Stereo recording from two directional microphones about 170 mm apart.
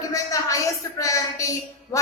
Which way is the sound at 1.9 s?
20° left (ahead or behind).